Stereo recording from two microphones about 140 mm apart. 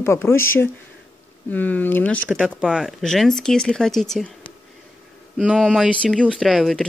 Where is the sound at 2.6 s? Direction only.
5° right (ahead or behind).